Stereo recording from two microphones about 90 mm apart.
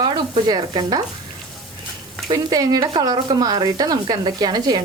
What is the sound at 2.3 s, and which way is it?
A woman's voice, 50° right (ahead or behind).